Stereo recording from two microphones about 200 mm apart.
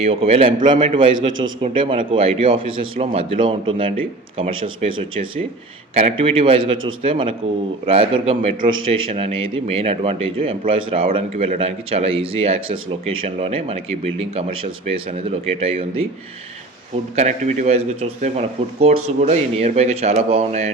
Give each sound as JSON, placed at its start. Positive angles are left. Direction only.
{"t": 0.0, "sound": "speech", "side_deg": -30}
{"t": 5.9, "sound": "speech", "side_deg": -30}
{"t": 17.2, "sound": "speech", "side_deg": -35}